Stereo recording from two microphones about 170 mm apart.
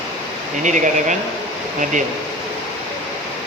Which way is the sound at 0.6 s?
45° right (ahead or behind).